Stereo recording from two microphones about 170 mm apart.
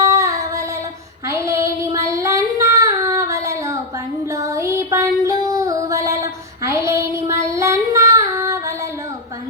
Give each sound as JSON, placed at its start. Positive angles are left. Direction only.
{"t": 0.0, "sound": "child singing", "side_deg": -20}
{"t": 4.3, "sound": "music", "side_deg": -20}
{"t": 5.2, "sound": "female singing", "side_deg": -20}